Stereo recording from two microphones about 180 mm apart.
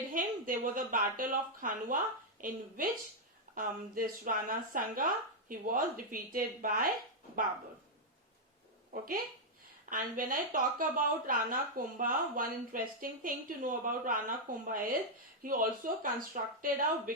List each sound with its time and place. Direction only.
0.1 s speech: 50° right (ahead or behind)
8.9 s speech: 50° right (ahead or behind)